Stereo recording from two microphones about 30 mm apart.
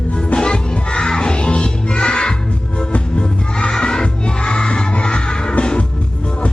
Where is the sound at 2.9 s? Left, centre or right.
Left.